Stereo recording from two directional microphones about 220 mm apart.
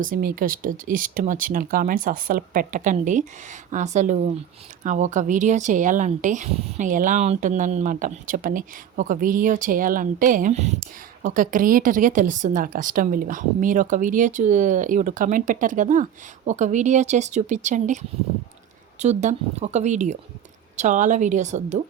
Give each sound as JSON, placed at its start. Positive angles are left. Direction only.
{"t": 0.1, "sound": "speech", "side_deg": -40}